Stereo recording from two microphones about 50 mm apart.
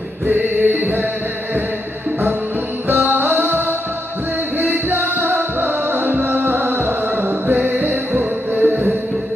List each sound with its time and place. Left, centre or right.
0.3 s music: right
2.9 s music: right